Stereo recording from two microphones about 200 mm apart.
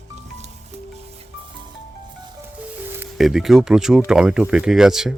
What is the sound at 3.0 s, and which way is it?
Speech, centre (ahead or behind).